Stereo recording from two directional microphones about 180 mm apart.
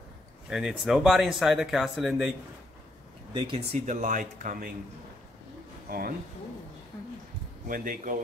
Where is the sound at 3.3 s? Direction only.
30° right (ahead or behind).